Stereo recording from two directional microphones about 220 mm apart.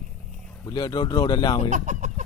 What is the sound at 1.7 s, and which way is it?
Chicken, 35° right (ahead or behind).